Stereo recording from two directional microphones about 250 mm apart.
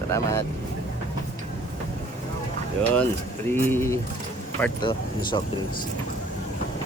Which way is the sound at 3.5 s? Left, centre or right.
Centre.